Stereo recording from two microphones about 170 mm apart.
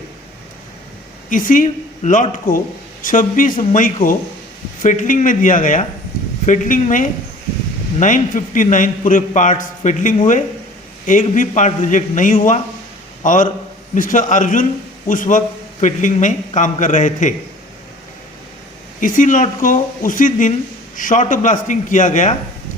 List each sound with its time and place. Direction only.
1.3 s a man's voice: 50° left (ahead or behind)
18.9 s a man's voice: 50° left (ahead or behind)